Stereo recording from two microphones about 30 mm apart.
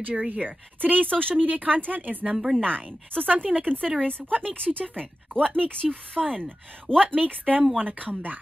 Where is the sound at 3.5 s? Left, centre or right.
Right.